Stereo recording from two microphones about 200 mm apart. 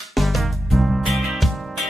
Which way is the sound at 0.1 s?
Centre (ahead or behind).